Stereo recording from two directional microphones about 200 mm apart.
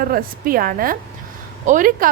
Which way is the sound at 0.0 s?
45° right (ahead or behind).